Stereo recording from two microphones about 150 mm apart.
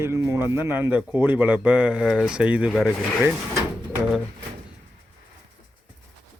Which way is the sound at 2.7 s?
5° left (ahead or behind).